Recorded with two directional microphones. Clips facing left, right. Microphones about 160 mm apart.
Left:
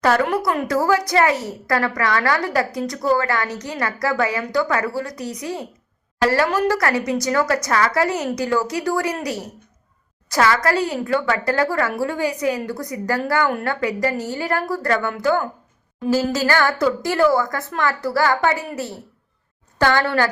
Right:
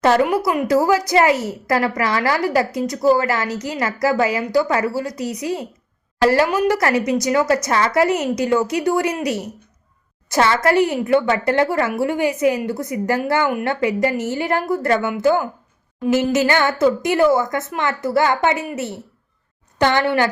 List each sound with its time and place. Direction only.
0.0 s speech: 25° right (ahead or behind)
0.3 s speech: centre (ahead or behind)
0.5 s a woman's voice: 20° right (ahead or behind)
16.3 s a woman's voice: 20° right (ahead or behind)